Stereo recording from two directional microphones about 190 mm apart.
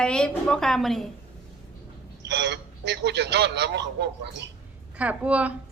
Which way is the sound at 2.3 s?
65° right (ahead or behind).